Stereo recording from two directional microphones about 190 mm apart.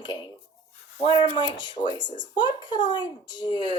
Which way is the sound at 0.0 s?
25° left (ahead or behind).